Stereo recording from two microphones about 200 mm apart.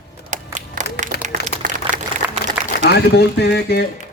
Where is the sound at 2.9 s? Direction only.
55° left (ahead or behind).